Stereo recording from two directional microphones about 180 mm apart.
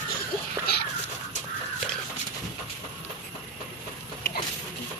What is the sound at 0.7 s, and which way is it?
Dog, 60° left (ahead or behind).